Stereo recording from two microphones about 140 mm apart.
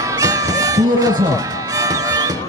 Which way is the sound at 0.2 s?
25° right (ahead or behind).